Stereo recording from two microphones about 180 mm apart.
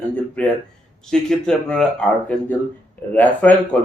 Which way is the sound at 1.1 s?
5° left (ahead or behind).